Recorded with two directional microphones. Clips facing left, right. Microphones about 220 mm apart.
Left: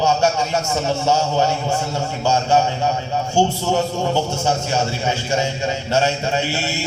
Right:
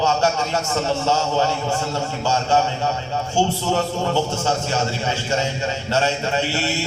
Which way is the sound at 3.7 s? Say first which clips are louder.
Left 1 dB; 15° left (ahead or behind).